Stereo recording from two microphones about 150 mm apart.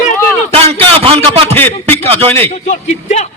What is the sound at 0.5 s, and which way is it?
A man's voice, 40° right (ahead or behind).